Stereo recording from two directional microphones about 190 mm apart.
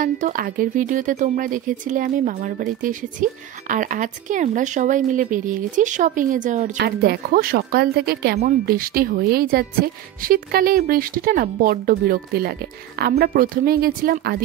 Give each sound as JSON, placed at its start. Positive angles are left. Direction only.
{"t": 0.0, "sound": "speech", "side_deg": -45}
{"t": 6.8, "sound": "speech", "side_deg": -55}